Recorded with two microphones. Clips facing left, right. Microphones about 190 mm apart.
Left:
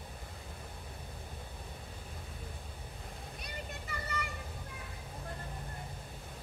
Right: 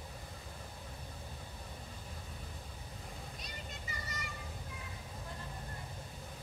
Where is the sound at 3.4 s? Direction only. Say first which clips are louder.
Left 3 dB; 60° left (ahead or behind).